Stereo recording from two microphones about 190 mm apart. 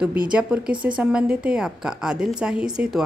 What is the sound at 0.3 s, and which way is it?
A woman's voice, 5° right (ahead or behind).